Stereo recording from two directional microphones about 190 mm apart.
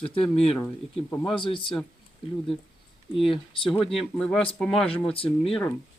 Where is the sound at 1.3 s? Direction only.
25° left (ahead or behind).